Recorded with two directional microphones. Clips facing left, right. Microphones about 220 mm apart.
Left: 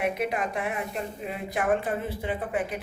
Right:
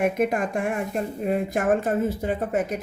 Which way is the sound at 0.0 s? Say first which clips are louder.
Right 5 dB; 45° right (ahead or behind).